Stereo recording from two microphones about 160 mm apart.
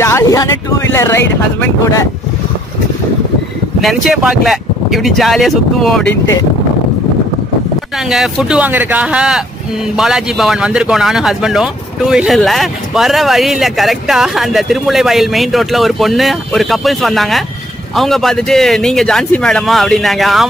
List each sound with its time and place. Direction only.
0.0 s speech: 20° left (ahead or behind)
3.8 s a man's voice: centre (ahead or behind)
8.1 s a man's voice: 5° right (ahead or behind)